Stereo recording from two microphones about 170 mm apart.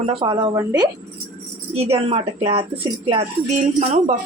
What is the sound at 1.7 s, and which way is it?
Speech, 35° right (ahead or behind).